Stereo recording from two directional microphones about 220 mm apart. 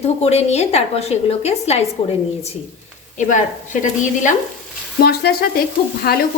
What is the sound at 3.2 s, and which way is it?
Speech, 35° left (ahead or behind).